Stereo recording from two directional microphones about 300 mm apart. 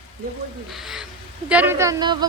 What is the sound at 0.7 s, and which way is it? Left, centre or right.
Speech, centre.